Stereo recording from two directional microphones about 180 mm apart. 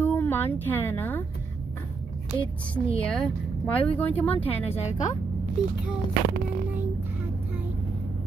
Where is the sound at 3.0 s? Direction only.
5° left (ahead or behind).